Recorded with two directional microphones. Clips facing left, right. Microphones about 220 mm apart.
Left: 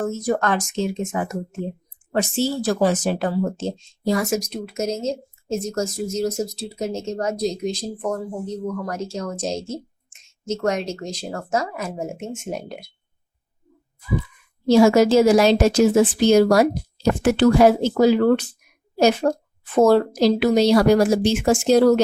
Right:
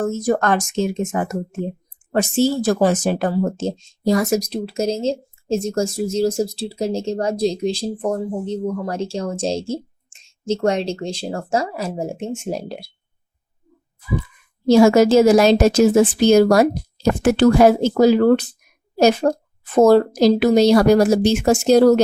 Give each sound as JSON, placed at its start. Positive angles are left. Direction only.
{"t": 0.0, "sound": "speech", "side_deg": -45}
{"t": 14.7, "sound": "speech", "side_deg": -45}